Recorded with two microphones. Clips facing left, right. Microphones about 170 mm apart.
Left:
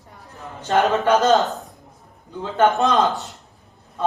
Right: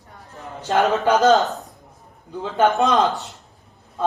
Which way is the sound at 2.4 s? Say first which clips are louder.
Even; centre (ahead or behind).